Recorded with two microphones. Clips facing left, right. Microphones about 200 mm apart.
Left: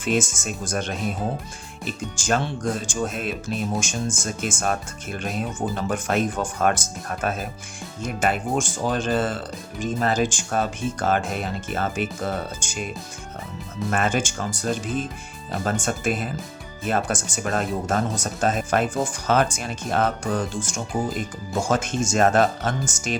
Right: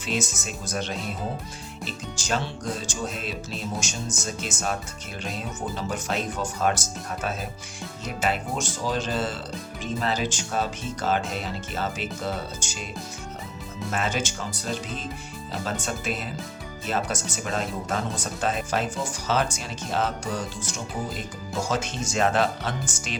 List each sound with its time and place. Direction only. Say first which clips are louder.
0.0 s speech: left 6 dB; 50° left (ahead or behind)
13.9 s speech: left 4 dB; 50° left (ahead or behind)